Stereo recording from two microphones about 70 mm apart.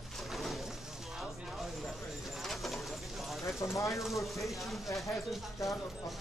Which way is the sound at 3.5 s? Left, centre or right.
Left.